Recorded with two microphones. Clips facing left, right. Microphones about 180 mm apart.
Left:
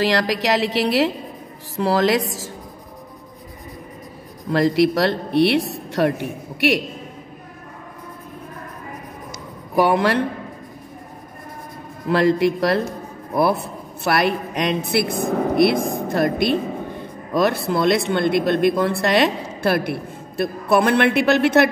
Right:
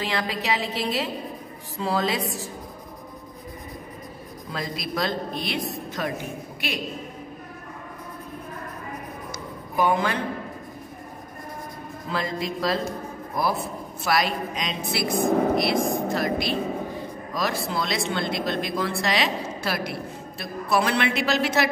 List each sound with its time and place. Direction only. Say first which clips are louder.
0.0 s a woman's voice: left 8 dB; 75° left (ahead or behind)
4.5 s a woman's voice: left 15 dB; 70° left (ahead or behind)
9.8 s a woman's voice: left 6 dB; 75° left (ahead or behind)
12.1 s a woman's voice: left 12 dB; 70° left (ahead or behind)